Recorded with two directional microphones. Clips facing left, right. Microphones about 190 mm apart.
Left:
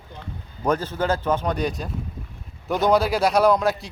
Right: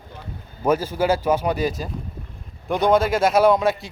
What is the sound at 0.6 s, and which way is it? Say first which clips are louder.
A man's voice: right 3 dB; 10° right (ahead or behind).